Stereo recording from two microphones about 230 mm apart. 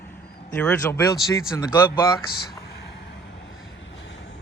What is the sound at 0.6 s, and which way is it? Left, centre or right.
Speech, centre.